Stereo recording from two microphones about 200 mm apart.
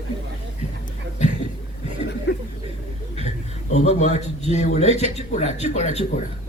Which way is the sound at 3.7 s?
35° left (ahead or behind).